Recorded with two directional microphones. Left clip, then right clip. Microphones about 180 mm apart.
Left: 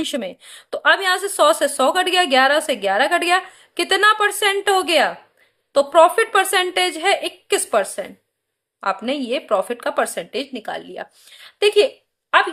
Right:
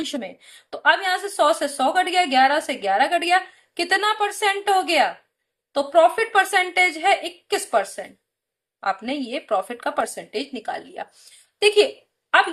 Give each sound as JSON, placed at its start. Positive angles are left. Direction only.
{"t": 0.0, "sound": "speech", "side_deg": 45}
{"t": 11.3, "sound": "speech", "side_deg": 25}